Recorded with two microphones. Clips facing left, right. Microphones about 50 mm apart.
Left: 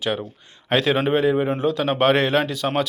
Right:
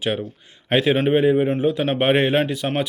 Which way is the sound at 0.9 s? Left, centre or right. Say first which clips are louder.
Right 2 dB; centre.